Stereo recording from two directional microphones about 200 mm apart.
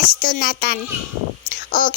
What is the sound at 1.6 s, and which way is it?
Speech, 45° left (ahead or behind).